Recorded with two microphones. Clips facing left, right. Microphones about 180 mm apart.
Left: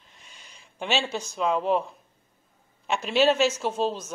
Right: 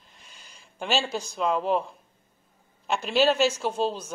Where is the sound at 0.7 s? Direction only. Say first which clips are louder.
Even; centre (ahead or behind).